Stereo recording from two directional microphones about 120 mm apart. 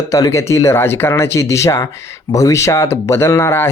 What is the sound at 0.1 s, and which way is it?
Speech, 25° left (ahead or behind).